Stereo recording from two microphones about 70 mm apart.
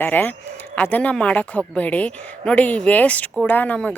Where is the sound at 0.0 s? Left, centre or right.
Left.